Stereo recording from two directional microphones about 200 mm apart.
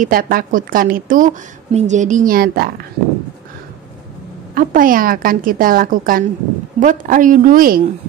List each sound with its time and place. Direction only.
0.0 s a woman's voice: 45° right (ahead or behind)
4.6 s a woman's voice: 45° right (ahead or behind)